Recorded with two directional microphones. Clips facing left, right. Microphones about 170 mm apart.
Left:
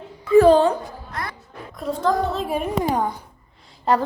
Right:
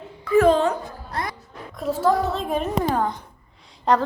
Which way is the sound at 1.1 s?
30° right (ahead or behind).